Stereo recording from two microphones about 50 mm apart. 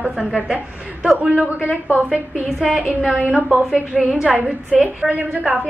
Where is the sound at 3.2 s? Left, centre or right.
Right.